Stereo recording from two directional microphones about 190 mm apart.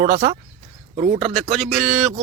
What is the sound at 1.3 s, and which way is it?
Speech, centre (ahead or behind).